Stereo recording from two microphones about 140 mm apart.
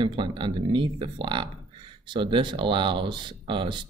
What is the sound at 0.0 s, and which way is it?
Speech, 35° right (ahead or behind).